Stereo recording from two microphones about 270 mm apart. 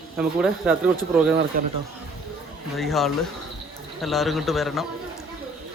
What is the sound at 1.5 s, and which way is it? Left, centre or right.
Speech, right.